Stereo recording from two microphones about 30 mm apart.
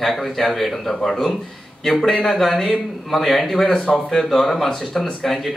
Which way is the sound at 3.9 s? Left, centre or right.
Centre.